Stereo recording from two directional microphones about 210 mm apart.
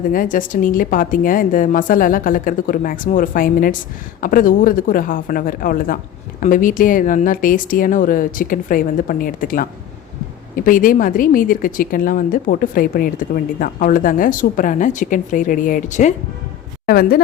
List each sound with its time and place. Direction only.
0.1 s a woman's voice: 40° left (ahead or behind)
16.8 s speech: 45° left (ahead or behind)